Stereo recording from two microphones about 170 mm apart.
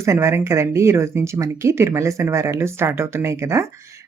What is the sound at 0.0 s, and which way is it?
A woman's voice, 15° right (ahead or behind).